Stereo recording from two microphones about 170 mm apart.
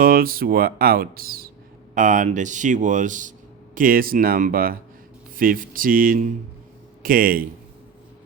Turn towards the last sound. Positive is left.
turn(degrees=-55)  # may be behind; listen again after turning